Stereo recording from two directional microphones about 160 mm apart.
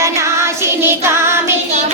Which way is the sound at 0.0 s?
20° right (ahead or behind).